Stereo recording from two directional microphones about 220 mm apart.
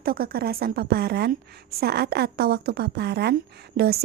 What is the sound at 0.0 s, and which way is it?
Speech, 45° right (ahead or behind).